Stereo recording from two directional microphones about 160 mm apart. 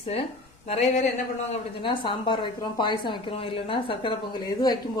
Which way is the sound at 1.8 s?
30° left (ahead or behind).